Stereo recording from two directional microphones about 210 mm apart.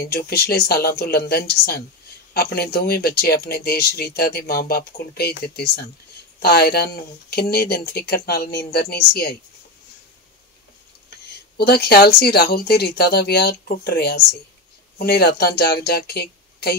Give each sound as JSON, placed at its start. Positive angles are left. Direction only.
{"t": 0.0, "sound": "speech", "side_deg": 50}
{"t": 6.4, "sound": "speech", "side_deg": 50}
{"t": 11.5, "sound": "speech", "side_deg": 50}